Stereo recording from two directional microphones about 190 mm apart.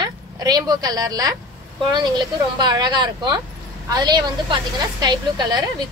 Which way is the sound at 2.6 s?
20° right (ahead or behind).